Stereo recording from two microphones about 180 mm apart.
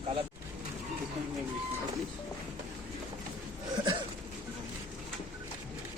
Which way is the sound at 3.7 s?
25° right (ahead or behind).